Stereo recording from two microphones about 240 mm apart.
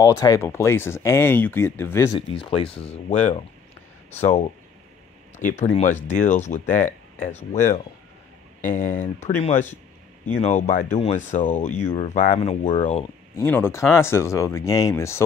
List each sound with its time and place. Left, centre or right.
0.0 s speech: centre
2.1 s speech: left
5.6 s speech: left
8.6 s speech: left
13.4 s speech: centre